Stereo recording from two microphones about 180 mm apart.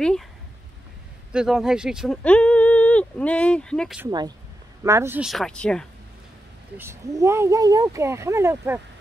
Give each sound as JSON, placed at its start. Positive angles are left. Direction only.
{"t": 0.0, "sound": "speech", "side_deg": 5}
{"t": 1.3, "sound": "speech", "side_deg": -5}
{"t": 4.8, "sound": "speech", "side_deg": -15}
{"t": 5.2, "sound": "speech", "side_deg": 0}
{"t": 6.8, "sound": "speech", "side_deg": -15}